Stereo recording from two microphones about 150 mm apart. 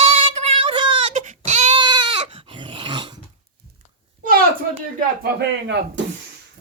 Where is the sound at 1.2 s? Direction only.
55° right (ahead or behind).